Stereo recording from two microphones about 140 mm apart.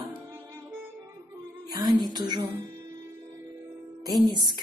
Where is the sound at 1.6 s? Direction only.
30° right (ahead or behind).